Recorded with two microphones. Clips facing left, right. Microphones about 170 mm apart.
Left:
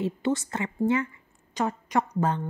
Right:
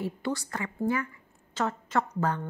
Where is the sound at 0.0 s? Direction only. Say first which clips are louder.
Left 5 dB; 20° left (ahead or behind).